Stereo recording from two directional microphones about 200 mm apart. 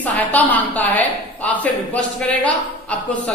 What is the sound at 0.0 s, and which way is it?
A woman's voice, 10° left (ahead or behind).